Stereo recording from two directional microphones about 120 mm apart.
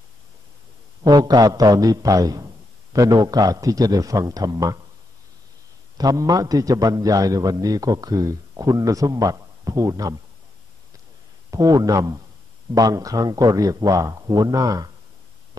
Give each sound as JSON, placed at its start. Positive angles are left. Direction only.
{"t": 1.0, "sound": "a man's voice", "side_deg": -35}
{"t": 5.9, "sound": "a man's voice", "side_deg": -30}
{"t": 11.5, "sound": "a man's voice", "side_deg": -30}